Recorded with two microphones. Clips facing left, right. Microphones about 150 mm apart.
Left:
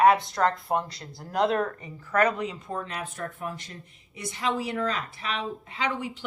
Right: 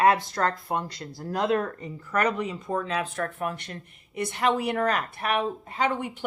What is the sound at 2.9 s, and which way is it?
Speech, 90° right.